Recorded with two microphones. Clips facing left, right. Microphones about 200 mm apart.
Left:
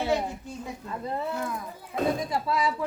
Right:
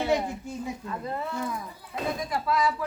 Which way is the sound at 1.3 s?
Centre (ahead or behind).